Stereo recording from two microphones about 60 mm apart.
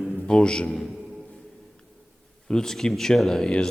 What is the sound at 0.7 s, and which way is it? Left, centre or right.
Speech, centre.